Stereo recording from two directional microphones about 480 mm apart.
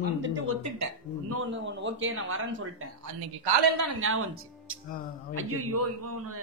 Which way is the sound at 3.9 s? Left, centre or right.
Right.